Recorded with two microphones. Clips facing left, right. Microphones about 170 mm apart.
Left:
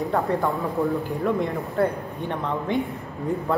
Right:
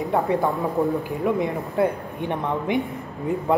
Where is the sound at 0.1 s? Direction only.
15° right (ahead or behind).